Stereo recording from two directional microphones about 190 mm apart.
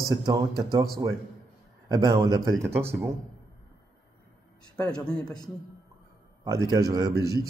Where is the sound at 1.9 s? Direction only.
20° right (ahead or behind).